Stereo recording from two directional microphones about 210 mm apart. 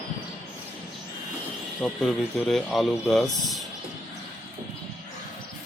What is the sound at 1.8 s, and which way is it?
Speech, centre (ahead or behind).